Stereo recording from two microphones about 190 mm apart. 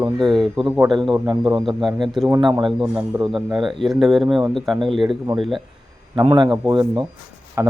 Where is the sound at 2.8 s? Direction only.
10° right (ahead or behind).